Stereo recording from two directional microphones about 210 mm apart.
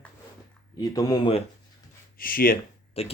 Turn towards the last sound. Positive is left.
turn(degrees=30)  # may be behind; listen again after turning